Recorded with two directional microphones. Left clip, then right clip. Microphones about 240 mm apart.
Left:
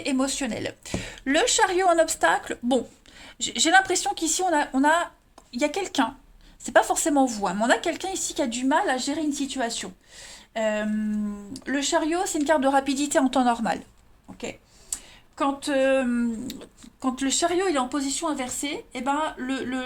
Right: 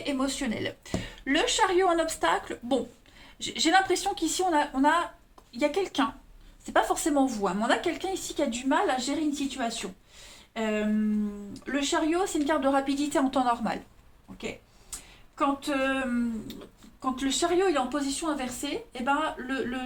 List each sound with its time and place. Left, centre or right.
0.0 s a woman's voice: left
15.4 s a woman's voice: left